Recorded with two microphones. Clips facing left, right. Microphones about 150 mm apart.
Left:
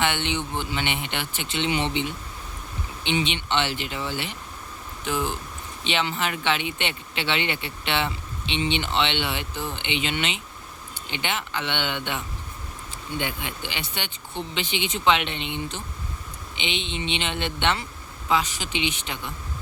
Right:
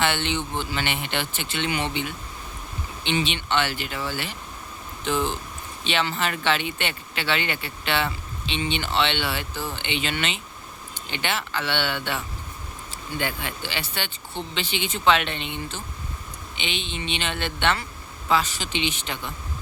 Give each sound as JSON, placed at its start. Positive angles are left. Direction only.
{"t": 0.0, "sound": "speech", "side_deg": 15}